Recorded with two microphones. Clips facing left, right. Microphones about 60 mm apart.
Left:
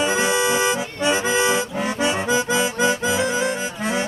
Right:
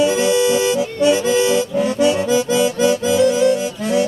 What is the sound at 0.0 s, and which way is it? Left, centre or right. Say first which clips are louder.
Accordion: right 5 dB; left.